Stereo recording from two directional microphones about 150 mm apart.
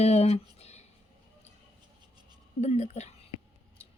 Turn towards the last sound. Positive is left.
turn(degrees=50)  # may be behind; listen again after turning